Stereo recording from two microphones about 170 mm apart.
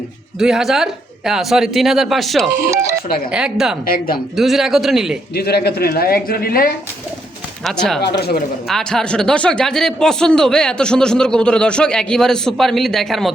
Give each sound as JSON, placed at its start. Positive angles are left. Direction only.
{"t": 0.3, "sound": "speech", "side_deg": 0}
{"t": 3.8, "sound": "a man's voice", "side_deg": 55}
{"t": 4.4, "sound": "speech", "side_deg": 0}
{"t": 5.3, "sound": "a man's voice", "side_deg": 65}
{"t": 7.6, "sound": "speech", "side_deg": 0}
{"t": 8.0, "sound": "speech", "side_deg": 70}
{"t": 8.7, "sound": "speech", "side_deg": 5}